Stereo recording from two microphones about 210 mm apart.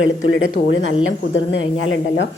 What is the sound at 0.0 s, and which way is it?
A woman's voice, 65° left (ahead or behind).